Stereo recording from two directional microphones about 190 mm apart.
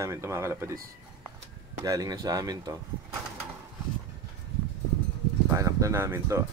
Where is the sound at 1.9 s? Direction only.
20° right (ahead or behind).